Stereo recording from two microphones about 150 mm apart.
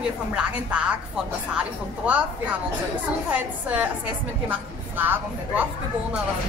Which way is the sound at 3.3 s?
10° right (ahead or behind).